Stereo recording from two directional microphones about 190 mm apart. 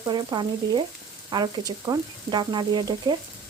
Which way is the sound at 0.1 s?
25° right (ahead or behind).